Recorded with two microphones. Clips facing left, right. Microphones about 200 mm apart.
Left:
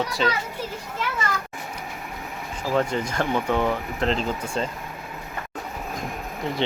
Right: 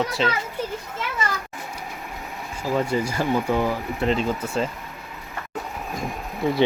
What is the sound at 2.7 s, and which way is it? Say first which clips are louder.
Speech: even; 10° right (ahead or behind).